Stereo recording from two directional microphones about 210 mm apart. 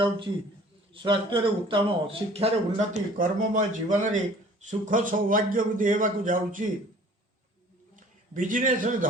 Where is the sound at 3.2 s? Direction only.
40° right (ahead or behind).